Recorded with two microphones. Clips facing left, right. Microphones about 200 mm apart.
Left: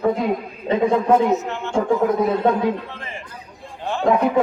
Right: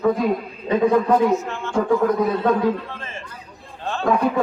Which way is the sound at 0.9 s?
25° left (ahead or behind).